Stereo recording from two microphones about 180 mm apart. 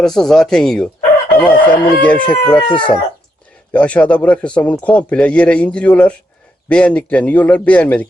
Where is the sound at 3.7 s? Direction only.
5° left (ahead or behind).